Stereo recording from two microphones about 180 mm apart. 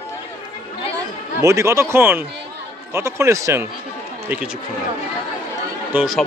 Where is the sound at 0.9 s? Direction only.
15° right (ahead or behind).